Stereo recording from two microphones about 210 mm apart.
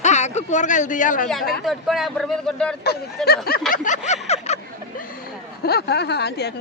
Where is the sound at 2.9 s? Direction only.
50° left (ahead or behind).